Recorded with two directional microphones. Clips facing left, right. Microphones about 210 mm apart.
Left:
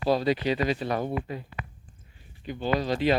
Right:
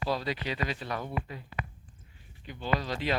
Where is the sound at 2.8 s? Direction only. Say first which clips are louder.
Left 8 dB; 25° left (ahead or behind).